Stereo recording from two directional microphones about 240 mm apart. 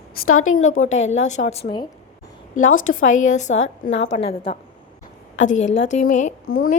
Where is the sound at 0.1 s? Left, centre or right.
Left.